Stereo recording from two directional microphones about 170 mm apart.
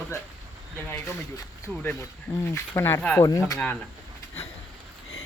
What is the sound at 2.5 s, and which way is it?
Speech, 15° left (ahead or behind).